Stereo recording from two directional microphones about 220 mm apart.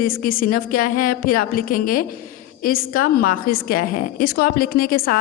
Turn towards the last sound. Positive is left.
turn(degrees=40)  # may be behind; listen again after turning